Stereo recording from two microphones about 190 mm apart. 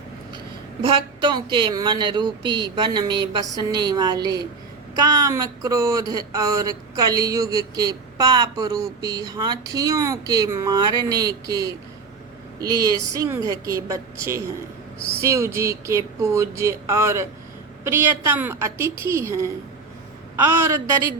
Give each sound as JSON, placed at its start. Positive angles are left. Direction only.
{"t": 0.8, "sound": "speech", "side_deg": -25}